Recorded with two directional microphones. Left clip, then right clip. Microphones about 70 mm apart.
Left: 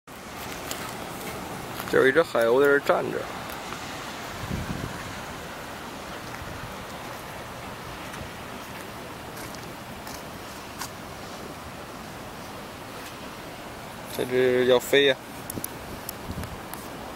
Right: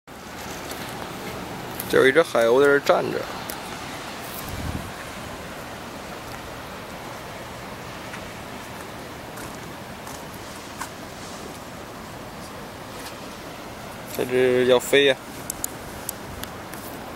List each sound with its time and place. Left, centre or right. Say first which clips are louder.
2.0 s speech: right 3 dB; centre
14.1 s speech: right 3 dB; centre